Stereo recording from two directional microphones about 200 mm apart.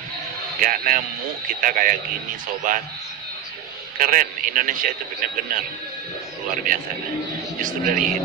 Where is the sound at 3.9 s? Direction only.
45° right (ahead or behind).